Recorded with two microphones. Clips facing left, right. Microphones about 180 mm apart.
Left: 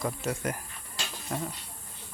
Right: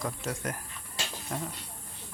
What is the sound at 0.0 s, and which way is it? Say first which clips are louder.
A man's voice: left 3 dB; centre (ahead or behind).